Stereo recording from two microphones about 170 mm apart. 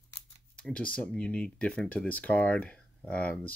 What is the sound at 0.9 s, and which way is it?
Speech, 5° left (ahead or behind).